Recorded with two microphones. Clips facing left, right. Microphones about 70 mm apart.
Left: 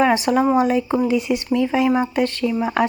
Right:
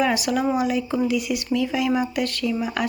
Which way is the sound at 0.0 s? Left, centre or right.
Left.